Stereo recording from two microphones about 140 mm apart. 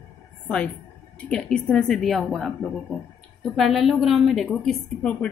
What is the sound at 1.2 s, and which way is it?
A woman's voice, 5° left (ahead or behind).